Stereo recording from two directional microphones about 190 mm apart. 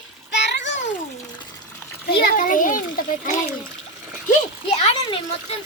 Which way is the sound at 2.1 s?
55° left (ahead or behind).